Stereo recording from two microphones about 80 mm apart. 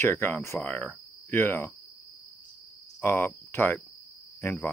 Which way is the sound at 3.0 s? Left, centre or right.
Left.